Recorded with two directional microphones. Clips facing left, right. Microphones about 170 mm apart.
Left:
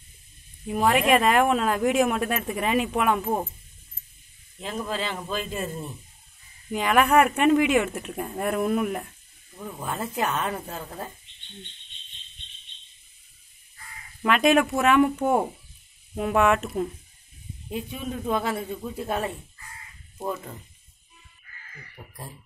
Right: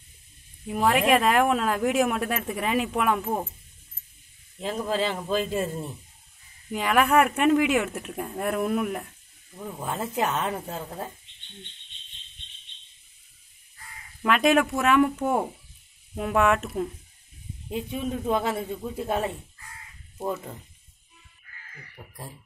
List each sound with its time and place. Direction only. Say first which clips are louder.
0.7 s speech: left 1 dB; centre (ahead or behind)
4.6 s a man's voice: right 3 dB; 30° right (ahead or behind)
6.7 s speech: left 1 dB; centre (ahead or behind)
9.6 s a man's voice: even; 10° right (ahead or behind)
14.2 s speech: left 1 dB; centre (ahead or behind)
16.2 s speech: left 1 dB; centre (ahead or behind)
17.6 s a man's voice: right 2 dB; 20° right (ahead or behind)
22.0 s speech: even; 5° left (ahead or behind)